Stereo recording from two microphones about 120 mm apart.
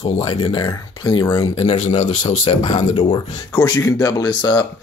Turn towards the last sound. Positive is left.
turn(degrees=35)  # may be behind; listen again after turning